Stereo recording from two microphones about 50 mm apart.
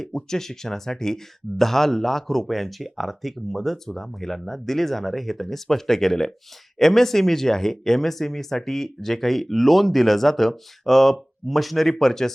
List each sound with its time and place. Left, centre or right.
0.0 s speech: centre